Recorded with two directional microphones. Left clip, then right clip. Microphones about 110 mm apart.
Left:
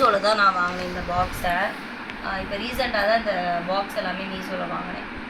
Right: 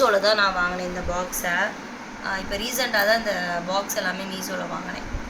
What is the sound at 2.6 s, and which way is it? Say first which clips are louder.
Speech: right 1 dB; 80° right.